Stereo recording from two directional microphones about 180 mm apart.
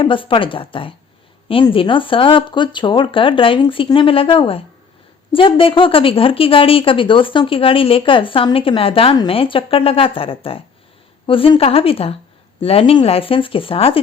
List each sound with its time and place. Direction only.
0.0 s speech: 30° left (ahead or behind)